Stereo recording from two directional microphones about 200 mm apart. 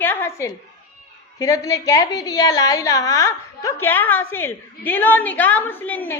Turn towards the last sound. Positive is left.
turn(degrees=10)  # may be behind; listen again after turning